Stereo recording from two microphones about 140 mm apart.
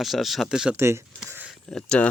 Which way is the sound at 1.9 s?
10° left (ahead or behind).